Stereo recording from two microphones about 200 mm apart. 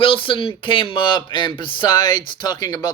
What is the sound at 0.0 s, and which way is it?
Speech, 25° left (ahead or behind).